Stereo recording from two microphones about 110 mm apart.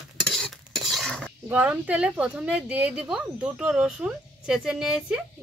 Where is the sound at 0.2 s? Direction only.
Centre (ahead or behind).